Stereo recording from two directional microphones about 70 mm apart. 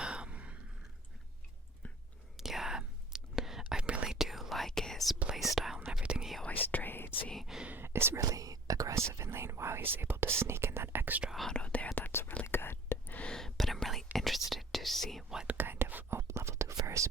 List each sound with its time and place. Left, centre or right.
0.0 s a sound: centre
2.4 s whispering: centre
5.8 s whispering: centre
6.4 s whispering: left
7.4 s whispering: centre
7.7 s whispering: right
8.2 s whispering: right
9.1 s whispering: right
11.5 s whispering: centre; by 13.1 s left
13.1 s whispering: centre
15.5 s whispering: right